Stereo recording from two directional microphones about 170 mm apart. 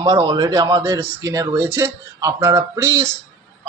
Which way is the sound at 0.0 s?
20° right (ahead or behind).